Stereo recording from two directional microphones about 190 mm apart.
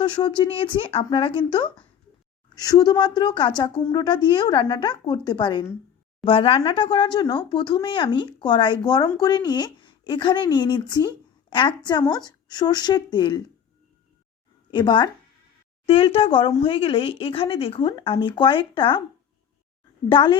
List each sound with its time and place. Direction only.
0.0 s speech: 25° left (ahead or behind)
14.7 s speech: 25° left (ahead or behind)
20.1 s speech: 25° left (ahead or behind)